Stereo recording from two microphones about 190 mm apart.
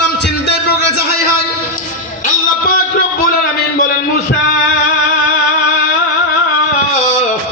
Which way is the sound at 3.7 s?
50° left (ahead or behind).